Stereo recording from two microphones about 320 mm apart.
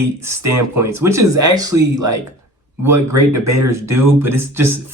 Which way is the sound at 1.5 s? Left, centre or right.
Centre.